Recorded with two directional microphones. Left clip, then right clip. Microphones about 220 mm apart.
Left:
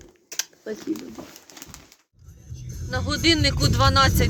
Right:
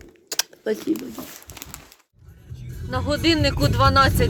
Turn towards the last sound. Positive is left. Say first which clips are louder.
# right 2 dB
turn(degrees=-10)  # may be behind; listen again after turning